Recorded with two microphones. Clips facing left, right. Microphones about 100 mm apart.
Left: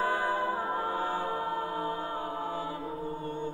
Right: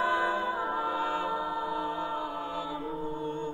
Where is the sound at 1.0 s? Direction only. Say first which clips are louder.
Right 1 dB; 10° left (ahead or behind).